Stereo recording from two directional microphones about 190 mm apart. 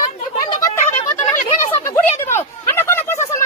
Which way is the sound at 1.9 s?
10° left (ahead or behind).